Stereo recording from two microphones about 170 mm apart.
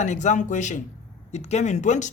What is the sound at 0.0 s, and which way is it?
A man's voice, 45° left (ahead or behind).